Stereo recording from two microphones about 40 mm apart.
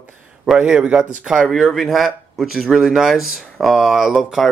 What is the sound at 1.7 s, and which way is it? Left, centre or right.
Speech, centre.